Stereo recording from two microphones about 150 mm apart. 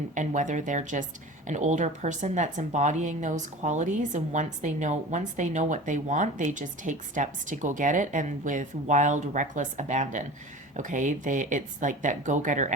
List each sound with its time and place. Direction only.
0.1 s a woman's voice: 55° right (ahead or behind)